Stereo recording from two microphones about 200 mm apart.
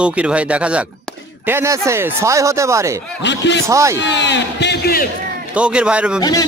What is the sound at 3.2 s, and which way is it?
Speech, 60° left (ahead or behind).